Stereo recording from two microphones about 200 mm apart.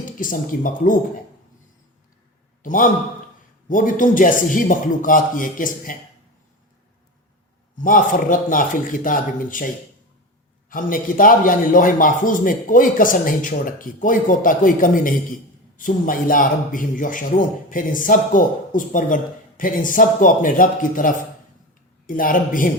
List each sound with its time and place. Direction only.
0.2 s a man's voice: 40° left (ahead or behind)
2.6 s a man's voice: 40° left (ahead or behind)
7.8 s a man's voice: 40° left (ahead or behind)
10.7 s a man's voice: 45° left (ahead or behind)